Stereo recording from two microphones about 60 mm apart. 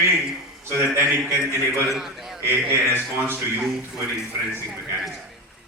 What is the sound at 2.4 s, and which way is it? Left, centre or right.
Speech, right.